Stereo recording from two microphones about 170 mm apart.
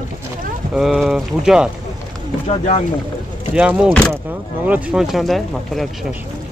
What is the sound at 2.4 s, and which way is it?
Speech, 40° left (ahead or behind).